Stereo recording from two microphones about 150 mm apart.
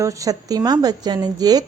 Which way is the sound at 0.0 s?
20° right (ahead or behind).